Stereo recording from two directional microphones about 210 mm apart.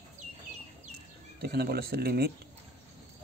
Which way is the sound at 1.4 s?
50° right (ahead or behind).